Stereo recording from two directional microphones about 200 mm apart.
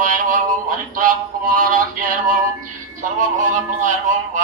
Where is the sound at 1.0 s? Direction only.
45° right (ahead or behind).